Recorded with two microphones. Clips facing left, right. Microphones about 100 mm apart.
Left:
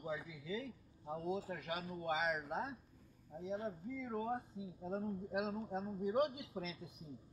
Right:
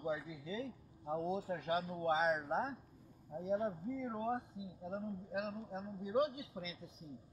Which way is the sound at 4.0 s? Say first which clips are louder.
Right 1 dB; 25° right (ahead or behind).